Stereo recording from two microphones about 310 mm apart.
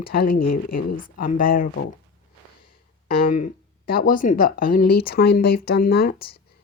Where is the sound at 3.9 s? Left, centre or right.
Left.